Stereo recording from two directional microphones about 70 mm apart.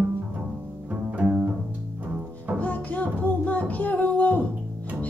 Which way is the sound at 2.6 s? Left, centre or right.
Left.